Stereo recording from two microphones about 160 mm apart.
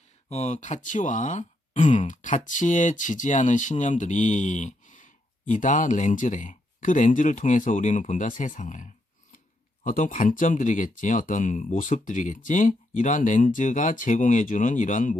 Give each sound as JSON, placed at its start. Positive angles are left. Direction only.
{"t": 0.3, "sound": "speech", "side_deg": 45}